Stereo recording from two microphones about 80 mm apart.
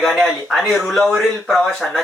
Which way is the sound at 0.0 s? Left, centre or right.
Centre.